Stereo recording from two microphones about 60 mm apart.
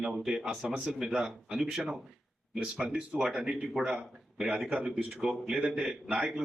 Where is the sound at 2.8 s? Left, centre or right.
Centre.